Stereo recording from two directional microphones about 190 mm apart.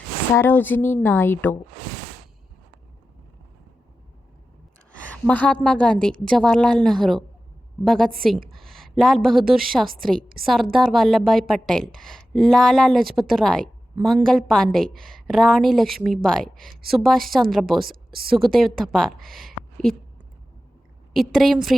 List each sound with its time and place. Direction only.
0.3 s speech: 10° left (ahead or behind)
4.9 s a woman's voice: 5° left (ahead or behind)
10.2 s a woman's voice: 50° right (ahead or behind)
10.4 s a woman's voice: centre (ahead or behind)
17.8 s a woman's voice: 50° right (ahead or behind)
18.3 s a woman's voice: centre (ahead or behind)
21.1 s a woman's voice: centre (ahead or behind)